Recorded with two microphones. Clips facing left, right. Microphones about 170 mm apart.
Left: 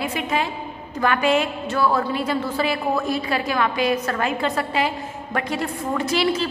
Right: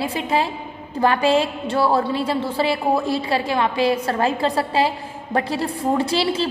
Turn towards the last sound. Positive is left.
turn(degrees=-30)  # may be behind; listen again after turning